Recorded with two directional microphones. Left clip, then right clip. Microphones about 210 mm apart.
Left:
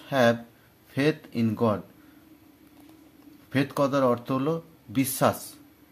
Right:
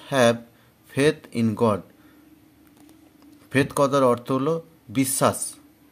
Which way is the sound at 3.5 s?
30° right (ahead or behind).